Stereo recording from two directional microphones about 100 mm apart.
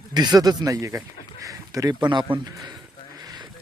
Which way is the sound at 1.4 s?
35° right (ahead or behind).